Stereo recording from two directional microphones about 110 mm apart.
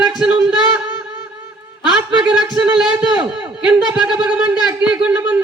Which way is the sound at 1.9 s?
5° right (ahead or behind).